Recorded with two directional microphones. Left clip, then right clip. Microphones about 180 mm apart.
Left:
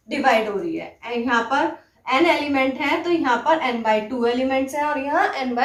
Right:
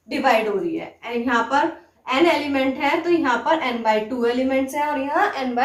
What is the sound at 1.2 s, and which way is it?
A woman's voice, 25° left (ahead or behind).